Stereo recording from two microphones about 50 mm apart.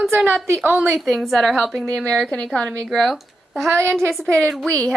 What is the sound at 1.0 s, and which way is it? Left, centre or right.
A woman's voice, centre.